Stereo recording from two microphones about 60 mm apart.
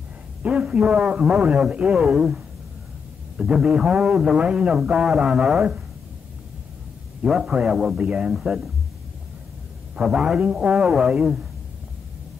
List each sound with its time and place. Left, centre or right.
0.4 s a sound: centre
0.7 s a man's voice: centre
3.4 s a man's voice: right
7.2 s a man's voice: centre
8.0 s a man's voice: right
8.3 s a man's voice: centre
9.9 s a man's voice: centre